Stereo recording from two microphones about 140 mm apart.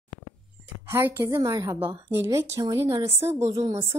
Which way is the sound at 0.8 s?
15° right (ahead or behind).